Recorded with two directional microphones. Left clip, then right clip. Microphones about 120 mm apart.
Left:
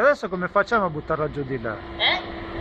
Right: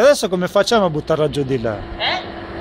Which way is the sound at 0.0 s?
60° right (ahead or behind).